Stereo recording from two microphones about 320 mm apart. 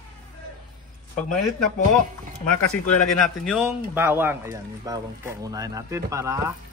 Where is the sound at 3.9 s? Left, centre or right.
Centre.